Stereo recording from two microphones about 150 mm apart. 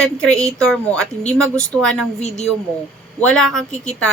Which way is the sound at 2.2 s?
45° left (ahead or behind).